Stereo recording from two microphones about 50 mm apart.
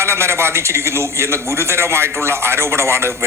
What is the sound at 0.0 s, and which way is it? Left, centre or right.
Speech, right.